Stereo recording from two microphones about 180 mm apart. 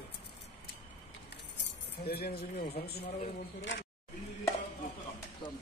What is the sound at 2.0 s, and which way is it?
Speech, 60° left (ahead or behind).